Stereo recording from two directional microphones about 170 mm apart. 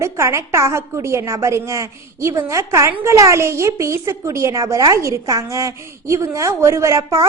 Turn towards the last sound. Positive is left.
turn(degrees=-20)  # may be behind; listen again after turning